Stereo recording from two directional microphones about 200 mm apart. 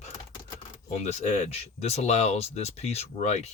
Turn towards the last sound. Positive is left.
turn(degrees=35)  # may be behind; listen again after turning